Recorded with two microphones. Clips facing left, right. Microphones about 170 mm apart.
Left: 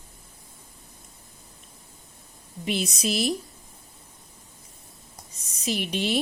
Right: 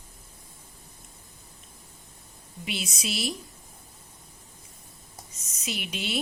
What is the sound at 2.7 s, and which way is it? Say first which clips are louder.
Speech: left 7 dB; 40° left (ahead or behind).